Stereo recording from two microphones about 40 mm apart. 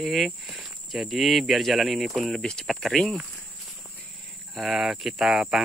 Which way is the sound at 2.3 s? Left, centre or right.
Centre.